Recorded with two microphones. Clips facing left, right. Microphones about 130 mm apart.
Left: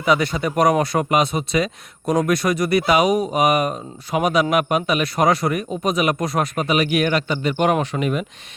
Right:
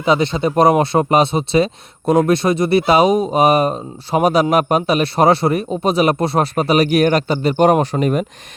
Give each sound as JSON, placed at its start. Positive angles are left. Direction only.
{"t": 0.0, "sound": "speech", "side_deg": -25}